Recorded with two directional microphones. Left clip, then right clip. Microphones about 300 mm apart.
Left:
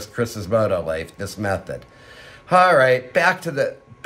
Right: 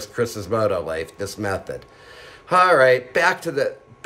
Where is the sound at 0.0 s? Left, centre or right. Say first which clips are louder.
Right 1 dB; centre.